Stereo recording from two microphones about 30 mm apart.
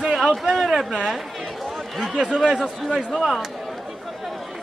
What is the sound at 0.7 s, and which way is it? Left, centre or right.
Speech, centre.